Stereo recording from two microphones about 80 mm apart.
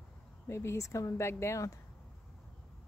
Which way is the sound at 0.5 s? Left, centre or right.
Left.